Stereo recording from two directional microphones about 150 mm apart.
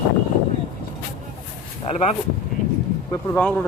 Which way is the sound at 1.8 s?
40° left (ahead or behind).